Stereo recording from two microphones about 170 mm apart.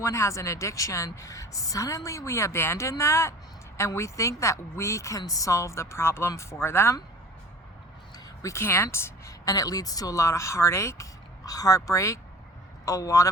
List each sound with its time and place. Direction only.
0.0 s a woman's voice: 15° left (ahead or behind)
8.4 s a woman's voice: 15° left (ahead or behind)